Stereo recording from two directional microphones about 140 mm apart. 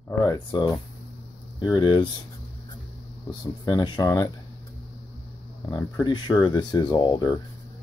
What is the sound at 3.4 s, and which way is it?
Speech, 25° left (ahead or behind).